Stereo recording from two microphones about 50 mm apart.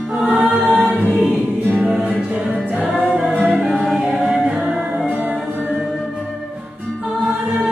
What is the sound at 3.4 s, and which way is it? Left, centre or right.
Music, right.